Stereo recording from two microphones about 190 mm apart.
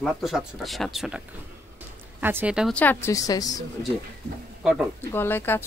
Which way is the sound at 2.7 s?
10° left (ahead or behind).